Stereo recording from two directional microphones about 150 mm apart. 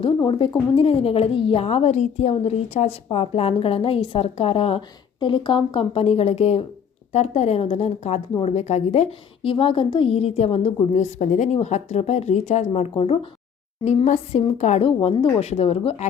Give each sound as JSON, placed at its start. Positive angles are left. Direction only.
{"t": 0.0, "sound": "a woman's voice", "side_deg": 35}